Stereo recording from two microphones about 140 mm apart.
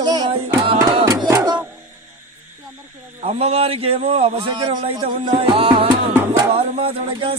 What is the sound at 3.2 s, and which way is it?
Music, 45° right (ahead or behind).